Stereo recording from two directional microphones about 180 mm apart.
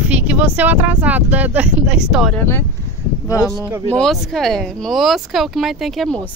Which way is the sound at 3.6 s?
15° right (ahead or behind).